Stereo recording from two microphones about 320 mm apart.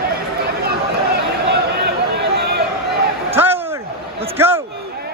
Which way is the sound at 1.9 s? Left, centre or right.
Right.